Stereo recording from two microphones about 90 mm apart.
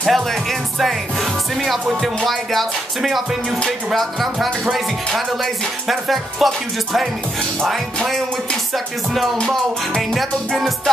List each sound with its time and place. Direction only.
0.0 s music: centre (ahead or behind)
2.0 s music: centre (ahead or behind)
8.7 s music: centre (ahead or behind)